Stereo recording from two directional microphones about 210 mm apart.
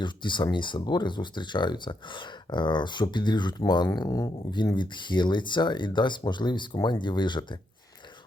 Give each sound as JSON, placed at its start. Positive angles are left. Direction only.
{"t": 0.0, "sound": "speech", "side_deg": 20}